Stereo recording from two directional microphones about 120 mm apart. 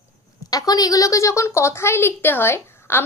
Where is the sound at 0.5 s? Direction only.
30° left (ahead or behind).